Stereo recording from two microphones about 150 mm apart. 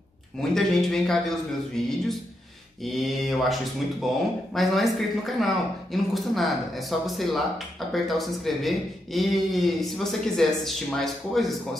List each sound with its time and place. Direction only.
0.4 s speech: 5° left (ahead or behind)